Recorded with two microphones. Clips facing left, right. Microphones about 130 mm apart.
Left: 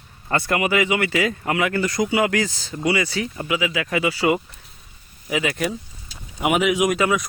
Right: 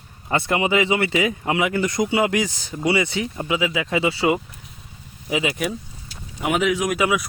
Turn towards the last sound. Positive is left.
turn(degrees=-5)  # may be behind; listen again after turning